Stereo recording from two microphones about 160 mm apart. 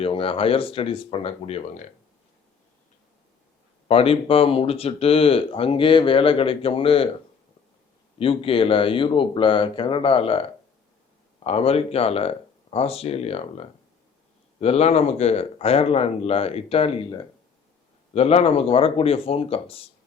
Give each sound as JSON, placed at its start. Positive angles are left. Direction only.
{"t": 0.0, "sound": "speech", "side_deg": 35}
{"t": 3.8, "sound": "speech", "side_deg": 35}
{"t": 8.2, "sound": "speech", "side_deg": 35}
{"t": 18.1, "sound": "speech", "side_deg": 40}